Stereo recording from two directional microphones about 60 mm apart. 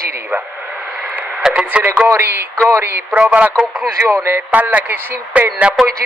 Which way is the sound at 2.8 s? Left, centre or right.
Right.